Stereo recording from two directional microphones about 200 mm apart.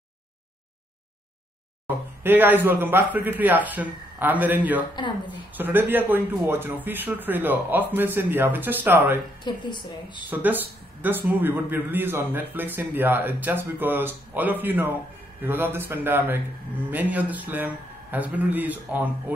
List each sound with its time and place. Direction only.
2.2 s a man's voice: 10° right (ahead or behind)
9.4 s a woman's voice: 20° left (ahead or behind)
10.3 s a man's voice: 10° right (ahead or behind)